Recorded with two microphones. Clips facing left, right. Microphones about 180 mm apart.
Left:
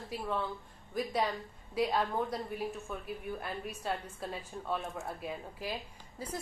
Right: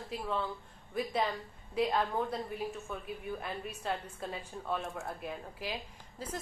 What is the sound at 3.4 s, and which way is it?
A woman's voice, 5° left (ahead or behind).